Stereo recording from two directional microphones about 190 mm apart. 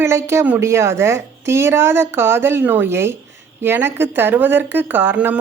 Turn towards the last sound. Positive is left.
turn(degrees=-10)  # may be behind; listen again after turning